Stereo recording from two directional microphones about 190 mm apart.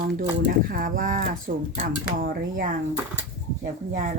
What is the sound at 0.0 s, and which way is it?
Speech, 50° right (ahead or behind).